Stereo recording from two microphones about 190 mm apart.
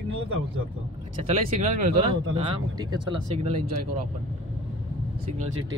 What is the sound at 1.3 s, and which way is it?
Speech, 35° right (ahead or behind).